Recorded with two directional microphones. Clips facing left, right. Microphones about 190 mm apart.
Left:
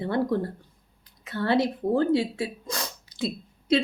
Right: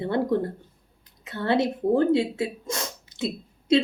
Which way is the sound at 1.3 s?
25° right (ahead or behind).